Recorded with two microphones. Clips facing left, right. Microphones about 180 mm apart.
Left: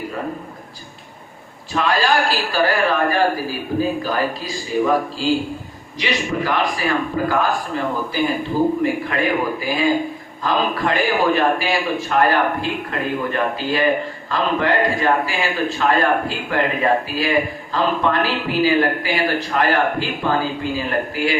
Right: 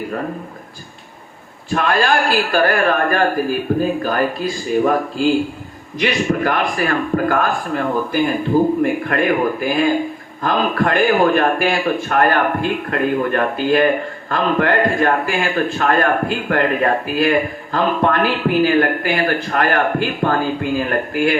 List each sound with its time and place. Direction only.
1.7 s a man's voice: 55° right (ahead or behind)